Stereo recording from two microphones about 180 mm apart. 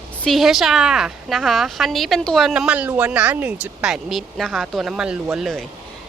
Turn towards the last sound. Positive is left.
turn(degrees=0)  # may be behind; listen again after turning